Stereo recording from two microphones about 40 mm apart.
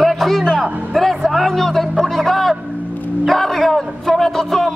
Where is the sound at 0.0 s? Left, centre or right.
Centre.